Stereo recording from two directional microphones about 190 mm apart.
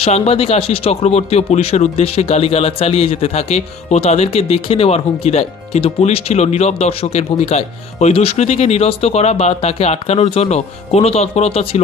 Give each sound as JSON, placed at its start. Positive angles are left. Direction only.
{"t": 0.0, "sound": "speech", "side_deg": 30}